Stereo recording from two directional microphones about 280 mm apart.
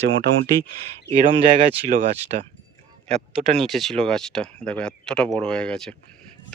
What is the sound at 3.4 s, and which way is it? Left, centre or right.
Speech, centre.